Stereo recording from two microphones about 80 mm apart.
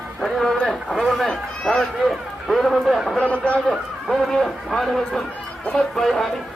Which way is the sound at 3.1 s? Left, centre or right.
Centre.